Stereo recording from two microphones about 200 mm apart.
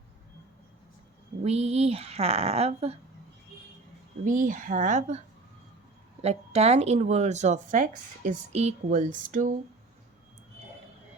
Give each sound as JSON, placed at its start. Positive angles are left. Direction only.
{"t": 1.5, "sound": "speech", "side_deg": -30}
{"t": 4.3, "sound": "speech", "side_deg": -40}
{"t": 6.2, "sound": "speech", "side_deg": -30}